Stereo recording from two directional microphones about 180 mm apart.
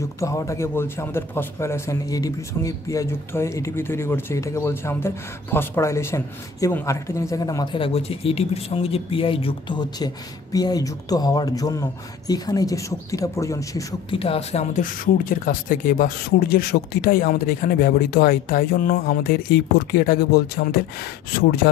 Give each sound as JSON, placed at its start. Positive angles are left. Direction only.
{"t": 0.2, "sound": "a man's voice", "side_deg": 15}
{"t": 14.1, "sound": "speech", "side_deg": 30}